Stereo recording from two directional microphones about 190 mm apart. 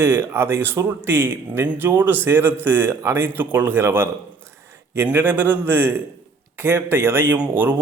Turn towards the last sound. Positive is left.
turn(degrees=-10)  # may be behind; listen again after turning